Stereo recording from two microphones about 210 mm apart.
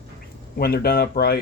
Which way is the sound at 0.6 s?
45° left (ahead or behind).